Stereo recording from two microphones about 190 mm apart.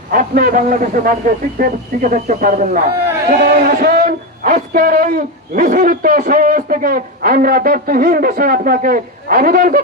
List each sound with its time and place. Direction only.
0.1 s a man's voice: 45° right (ahead or behind)